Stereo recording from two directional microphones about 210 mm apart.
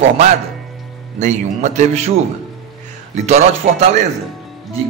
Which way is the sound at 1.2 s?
35° right (ahead or behind).